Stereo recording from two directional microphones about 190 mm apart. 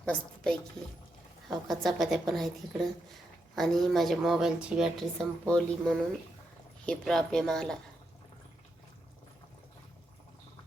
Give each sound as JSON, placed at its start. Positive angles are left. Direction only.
{"t": 0.0, "sound": "a woman's voice", "side_deg": 5}
{"t": 3.5, "sound": "a woman's voice", "side_deg": 0}